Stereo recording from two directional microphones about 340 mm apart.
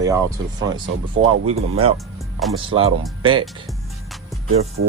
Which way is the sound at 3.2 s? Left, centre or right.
Centre.